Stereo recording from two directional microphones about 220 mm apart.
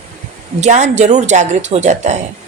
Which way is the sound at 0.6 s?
30° right (ahead or behind).